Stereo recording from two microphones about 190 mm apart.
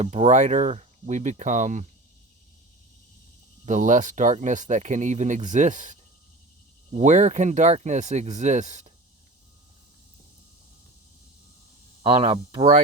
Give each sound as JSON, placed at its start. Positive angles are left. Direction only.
{"t": 0.0, "sound": "speech", "side_deg": -35}
{"t": 3.7, "sound": "speech", "side_deg": -40}
{"t": 12.0, "sound": "speech", "side_deg": -30}